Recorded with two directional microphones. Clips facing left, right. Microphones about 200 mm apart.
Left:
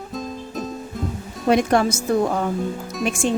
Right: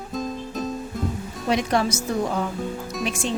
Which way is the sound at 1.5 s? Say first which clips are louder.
Left 5 dB; 50° left (ahead or behind).